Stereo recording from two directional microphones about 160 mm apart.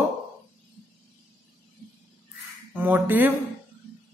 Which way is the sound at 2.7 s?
10° right (ahead or behind).